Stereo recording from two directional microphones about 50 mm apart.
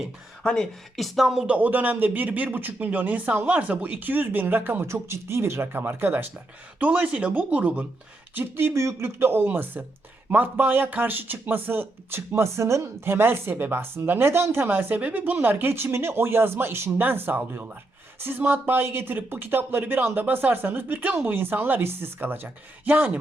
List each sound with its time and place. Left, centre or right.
0.4 s speech: centre
0.9 s speech: centre
1.5 s speech: right
6.7 s speech: right
8.7 s speech: right
12.4 s speech: right
13.1 s speech: right